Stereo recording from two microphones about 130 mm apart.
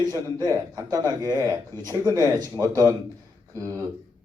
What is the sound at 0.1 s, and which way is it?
A man's voice, 30° right (ahead or behind).